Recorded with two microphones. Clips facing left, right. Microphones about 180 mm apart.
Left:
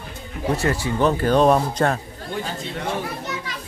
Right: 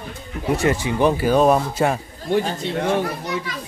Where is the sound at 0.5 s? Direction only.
15° right (ahead or behind).